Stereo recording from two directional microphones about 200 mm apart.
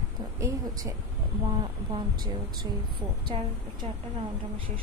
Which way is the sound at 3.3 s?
25° right (ahead or behind).